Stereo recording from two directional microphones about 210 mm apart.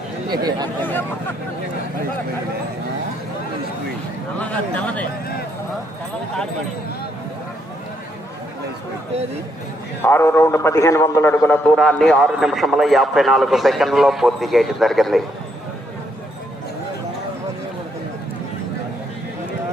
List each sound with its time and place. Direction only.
0.3 s speech: 20° right (ahead or behind)
0.8 s speech: 10° left (ahead or behind)
4.4 s speech: 5° left (ahead or behind)
10.0 s a man's voice: 10° left (ahead or behind)